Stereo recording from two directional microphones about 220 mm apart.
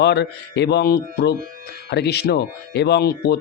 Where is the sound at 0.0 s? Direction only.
50° left (ahead or behind).